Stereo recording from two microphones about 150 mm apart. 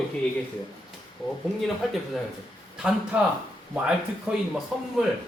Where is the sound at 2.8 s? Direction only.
5° right (ahead or behind).